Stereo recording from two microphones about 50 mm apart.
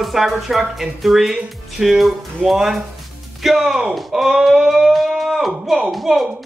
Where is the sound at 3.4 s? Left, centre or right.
Centre.